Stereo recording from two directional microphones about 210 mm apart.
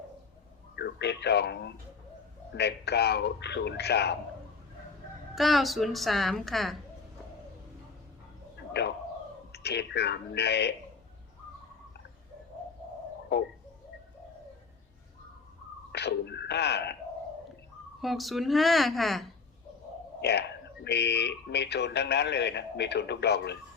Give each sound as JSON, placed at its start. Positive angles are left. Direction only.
{"t": 0.8, "sound": "speech", "side_deg": 55}
{"t": 5.3, "sound": "a woman's voice", "side_deg": 0}
{"t": 8.7, "sound": "speech", "side_deg": 55}
{"t": 13.3, "sound": "speech", "side_deg": 50}
{"t": 15.9, "sound": "a sound", "side_deg": 50}
{"t": 18.0, "sound": "a woman's voice", "side_deg": 0}
{"t": 20.8, "sound": "speech", "side_deg": 55}